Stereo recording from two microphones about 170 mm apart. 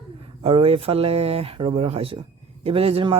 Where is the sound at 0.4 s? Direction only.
35° right (ahead or behind).